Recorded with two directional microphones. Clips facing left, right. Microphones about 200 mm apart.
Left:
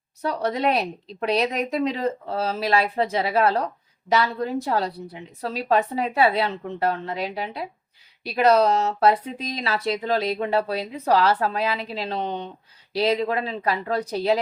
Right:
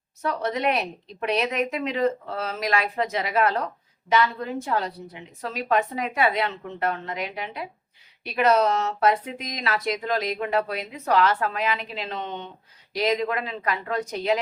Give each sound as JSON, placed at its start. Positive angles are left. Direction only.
{"t": 0.2, "sound": "speech", "side_deg": 35}